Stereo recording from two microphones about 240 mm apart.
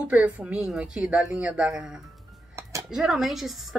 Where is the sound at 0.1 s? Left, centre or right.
Centre.